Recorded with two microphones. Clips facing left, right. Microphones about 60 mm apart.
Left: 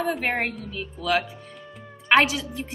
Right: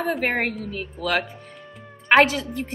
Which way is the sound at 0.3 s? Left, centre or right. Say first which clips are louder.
Right 2 dB; right.